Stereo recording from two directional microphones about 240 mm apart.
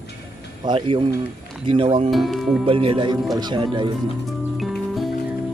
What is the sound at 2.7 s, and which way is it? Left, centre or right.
Speech, right.